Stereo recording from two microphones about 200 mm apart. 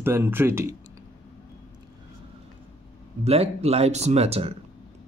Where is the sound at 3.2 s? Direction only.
30° right (ahead or behind).